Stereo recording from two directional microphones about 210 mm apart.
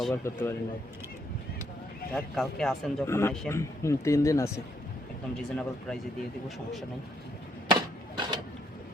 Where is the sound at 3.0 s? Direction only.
10° left (ahead or behind).